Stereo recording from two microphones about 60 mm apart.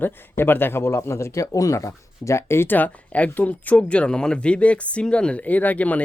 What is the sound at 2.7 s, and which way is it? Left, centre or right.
Speech, left.